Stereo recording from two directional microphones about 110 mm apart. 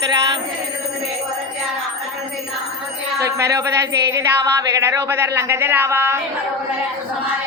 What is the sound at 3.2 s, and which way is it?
Speech, 25° right (ahead or behind).